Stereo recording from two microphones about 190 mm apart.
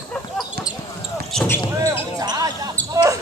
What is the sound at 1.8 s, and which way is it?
Basketball bounce, 20° right (ahead or behind).